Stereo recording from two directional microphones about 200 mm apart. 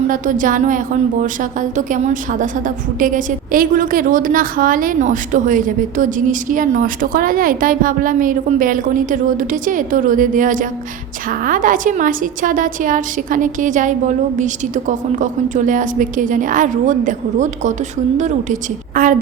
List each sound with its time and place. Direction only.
0.1 s a woman's voice: 40° right (ahead or behind)
19.0 s a woman's voice: 45° right (ahead or behind)